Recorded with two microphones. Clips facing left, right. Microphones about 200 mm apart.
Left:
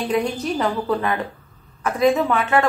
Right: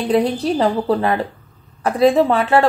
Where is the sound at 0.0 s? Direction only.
35° right (ahead or behind).